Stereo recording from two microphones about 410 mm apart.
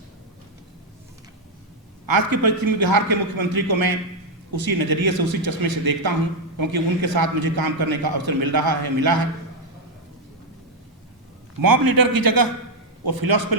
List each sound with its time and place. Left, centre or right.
2.0 s a man's voice: right
11.6 s a man's voice: right